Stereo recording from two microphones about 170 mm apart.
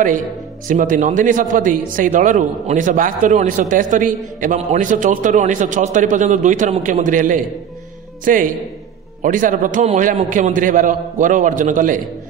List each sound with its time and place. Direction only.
0.7 s a man's voice: 50° right (ahead or behind)